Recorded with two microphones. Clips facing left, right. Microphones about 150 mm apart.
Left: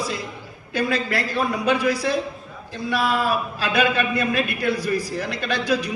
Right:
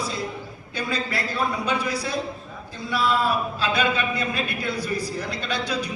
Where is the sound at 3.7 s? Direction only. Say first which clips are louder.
Left 6 dB; 55° left (ahead or behind).